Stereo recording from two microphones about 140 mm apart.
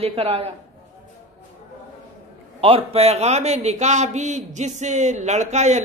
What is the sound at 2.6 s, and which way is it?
A man's voice, 45° right (ahead or behind).